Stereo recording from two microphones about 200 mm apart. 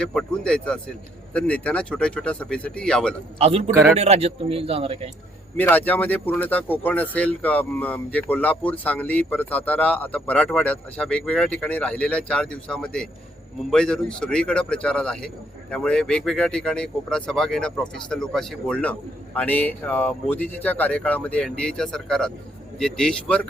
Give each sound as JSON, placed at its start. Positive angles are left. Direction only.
{"t": 0.0, "sound": "speech", "side_deg": 5}
{"t": 3.3, "sound": "a man's voice", "side_deg": -30}
{"t": 3.7, "sound": "a man's voice", "side_deg": -15}
{"t": 3.9, "sound": "a man's voice", "side_deg": -30}
{"t": 5.5, "sound": "speech", "side_deg": 10}